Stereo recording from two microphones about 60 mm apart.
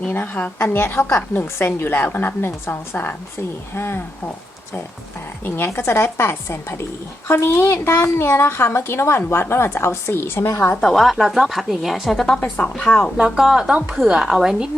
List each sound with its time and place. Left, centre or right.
0.1 s a woman's voice: left
5.5 s a woman's voice: left
10.8 s a woman's voice: centre
12.4 s speech: left
12.7 s speech: centre
13.1 s a woman's voice: centre
13.4 s a woman's voice: centre